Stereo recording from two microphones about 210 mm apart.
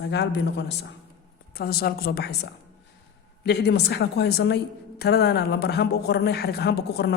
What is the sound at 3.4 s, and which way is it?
A woman's voice, 50° left (ahead or behind).